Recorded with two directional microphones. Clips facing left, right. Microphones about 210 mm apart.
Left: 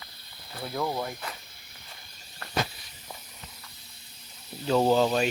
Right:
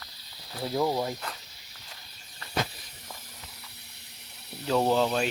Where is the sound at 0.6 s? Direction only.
25° right (ahead or behind).